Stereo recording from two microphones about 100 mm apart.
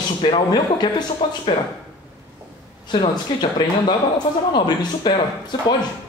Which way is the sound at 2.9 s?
55° left (ahead or behind).